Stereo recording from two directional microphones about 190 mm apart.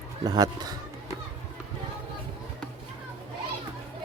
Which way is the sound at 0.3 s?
20° right (ahead or behind).